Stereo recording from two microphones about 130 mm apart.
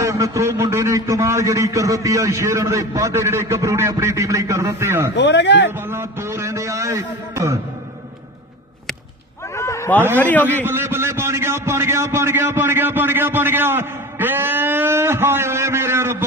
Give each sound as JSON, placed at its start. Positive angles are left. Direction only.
{"t": 0.0, "sound": "a man's voice", "side_deg": -25}
{"t": 9.6, "sound": "a sound", "side_deg": 20}
{"t": 10.1, "sound": "a man's voice", "side_deg": 15}
{"t": 10.6, "sound": "a man's voice", "side_deg": -15}